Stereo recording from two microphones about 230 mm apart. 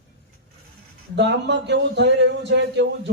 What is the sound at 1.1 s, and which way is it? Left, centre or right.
Speech, right.